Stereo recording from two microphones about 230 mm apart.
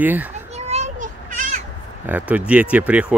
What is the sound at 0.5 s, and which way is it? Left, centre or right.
Children playing, right.